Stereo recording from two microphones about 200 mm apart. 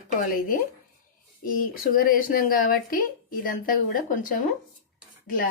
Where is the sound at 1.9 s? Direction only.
45° left (ahead or behind).